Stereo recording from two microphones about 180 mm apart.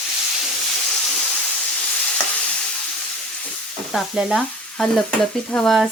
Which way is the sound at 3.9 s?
Centre (ahead or behind).